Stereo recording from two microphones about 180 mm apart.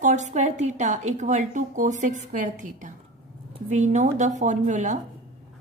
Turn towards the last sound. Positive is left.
turn(degrees=-45)  # may be behind; listen again after turning